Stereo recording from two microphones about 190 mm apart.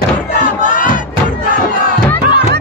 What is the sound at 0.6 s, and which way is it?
Battle cry, 45° left (ahead or behind).